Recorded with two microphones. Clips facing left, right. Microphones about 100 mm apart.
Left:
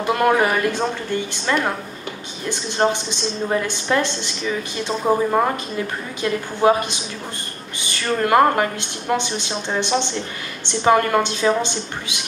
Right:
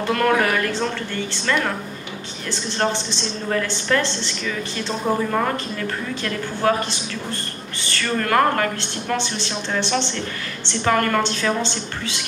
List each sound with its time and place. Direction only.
0.0 s speech: 15° left (ahead or behind)